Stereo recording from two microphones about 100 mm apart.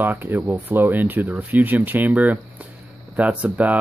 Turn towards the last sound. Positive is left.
turn(degrees=-15)  # may be behind; listen again after turning